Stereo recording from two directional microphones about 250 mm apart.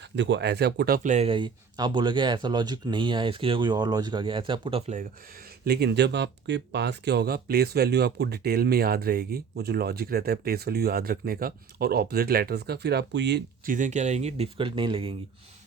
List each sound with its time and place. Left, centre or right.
0.2 s speech: right
5.6 s speech: right